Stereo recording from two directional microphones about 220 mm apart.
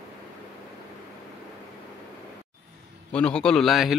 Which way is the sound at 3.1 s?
5° left (ahead or behind).